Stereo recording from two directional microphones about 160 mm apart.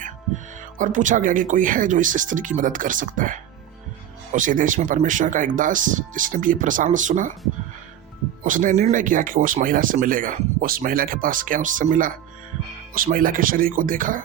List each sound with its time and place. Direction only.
0.8 s speech: 55° right (ahead or behind)
8.4 s speech: 55° right (ahead or behind)